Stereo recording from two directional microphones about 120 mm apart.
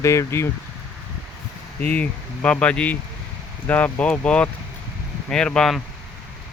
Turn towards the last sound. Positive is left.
turn(degrees=5)  # may be behind; listen again after turning